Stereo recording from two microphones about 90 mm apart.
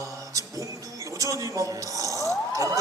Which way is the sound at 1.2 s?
40° right (ahead or behind).